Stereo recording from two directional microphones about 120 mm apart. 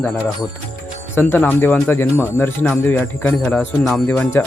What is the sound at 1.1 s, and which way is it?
Speech, 15° left (ahead or behind).